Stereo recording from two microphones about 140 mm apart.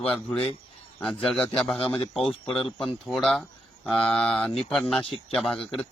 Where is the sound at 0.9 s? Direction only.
5° left (ahead or behind).